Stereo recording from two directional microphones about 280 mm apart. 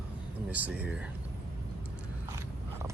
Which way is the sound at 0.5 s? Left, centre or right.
Centre.